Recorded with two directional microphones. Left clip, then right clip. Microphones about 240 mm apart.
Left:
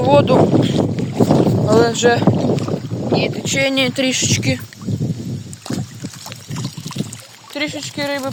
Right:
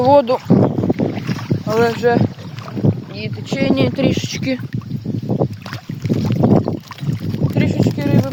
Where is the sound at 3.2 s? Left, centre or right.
Centre.